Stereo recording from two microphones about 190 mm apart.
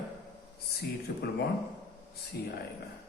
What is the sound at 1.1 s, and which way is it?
Speech, 60° left (ahead or behind).